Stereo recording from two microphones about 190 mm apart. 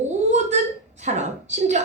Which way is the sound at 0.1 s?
35° right (ahead or behind).